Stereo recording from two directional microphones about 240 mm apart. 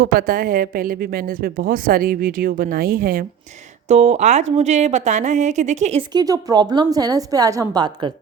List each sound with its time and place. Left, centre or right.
0.0 s a woman's voice: right; by 8.1 s centre